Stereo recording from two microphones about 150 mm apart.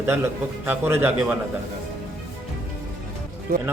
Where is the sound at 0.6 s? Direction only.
15° right (ahead or behind).